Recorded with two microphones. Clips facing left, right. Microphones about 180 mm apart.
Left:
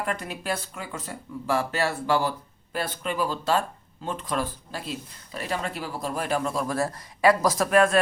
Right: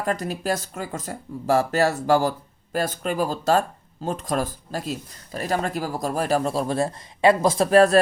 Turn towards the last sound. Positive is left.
turn(degrees=-35)  # may be behind; listen again after turning